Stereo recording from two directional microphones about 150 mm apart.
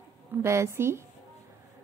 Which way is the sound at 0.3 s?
15° right (ahead or behind).